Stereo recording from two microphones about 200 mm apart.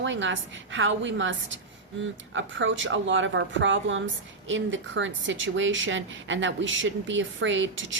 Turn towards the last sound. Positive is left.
turn(degrees=-70)  # may be behind; listen again after turning